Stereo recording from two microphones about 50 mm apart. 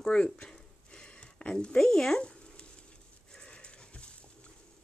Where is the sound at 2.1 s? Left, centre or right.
Left.